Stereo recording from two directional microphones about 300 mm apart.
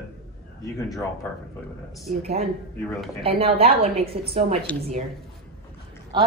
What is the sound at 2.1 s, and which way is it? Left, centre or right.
Speech, right.